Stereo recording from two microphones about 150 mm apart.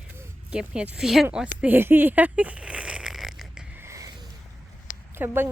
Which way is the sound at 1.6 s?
15° right (ahead or behind).